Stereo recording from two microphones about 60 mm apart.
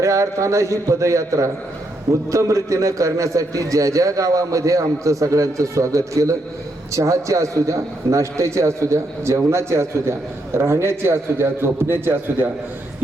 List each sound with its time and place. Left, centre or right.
0.0 s a man's voice: right